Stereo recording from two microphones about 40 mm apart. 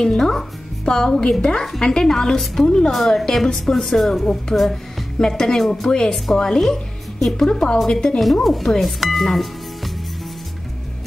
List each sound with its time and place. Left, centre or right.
0.0 s speech: centre
2.9 s speech: centre
4.5 s speech: left
5.2 s speech: centre
8.2 s speech: centre